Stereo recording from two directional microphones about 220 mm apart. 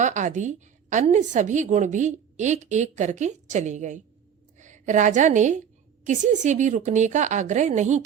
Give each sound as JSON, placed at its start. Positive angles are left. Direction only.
{"t": 0.0, "sound": "a woman's voice", "side_deg": -35}